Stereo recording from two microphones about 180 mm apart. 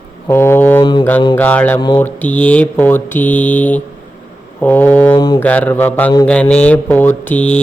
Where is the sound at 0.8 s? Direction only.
25° left (ahead or behind).